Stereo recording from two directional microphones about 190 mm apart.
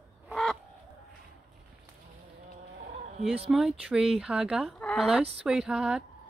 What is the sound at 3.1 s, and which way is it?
Speech, 30° right (ahead or behind).